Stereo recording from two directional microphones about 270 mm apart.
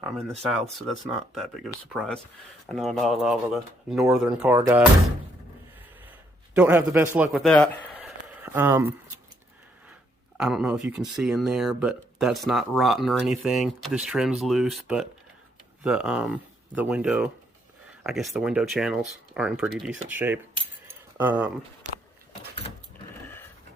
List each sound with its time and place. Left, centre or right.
0.0 s speech: centre
6.6 s speech: centre
7.9 s a sound: centre
10.3 s speech: centre
20.6 s keys jangling: centre
23.2 s goat: centre